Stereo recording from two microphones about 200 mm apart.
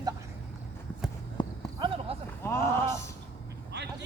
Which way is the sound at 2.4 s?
15° left (ahead or behind).